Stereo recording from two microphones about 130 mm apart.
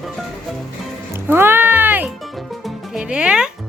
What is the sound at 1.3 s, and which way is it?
Music, 15° right (ahead or behind).